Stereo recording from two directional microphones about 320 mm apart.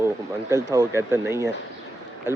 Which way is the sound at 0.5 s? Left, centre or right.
Centre.